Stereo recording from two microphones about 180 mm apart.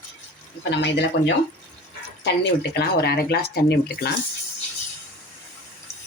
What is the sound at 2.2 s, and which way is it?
Speech, 70° left (ahead or behind).